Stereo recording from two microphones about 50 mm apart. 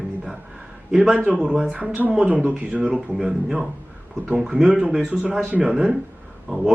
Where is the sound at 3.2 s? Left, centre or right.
Centre.